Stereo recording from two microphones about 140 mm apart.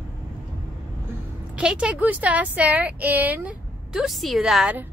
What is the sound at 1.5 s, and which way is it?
Speech, 5° right (ahead or behind).